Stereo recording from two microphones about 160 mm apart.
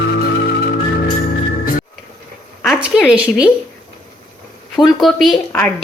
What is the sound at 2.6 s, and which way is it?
Speech, centre (ahead or behind).